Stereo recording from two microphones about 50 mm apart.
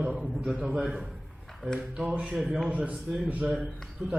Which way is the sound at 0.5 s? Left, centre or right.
Right.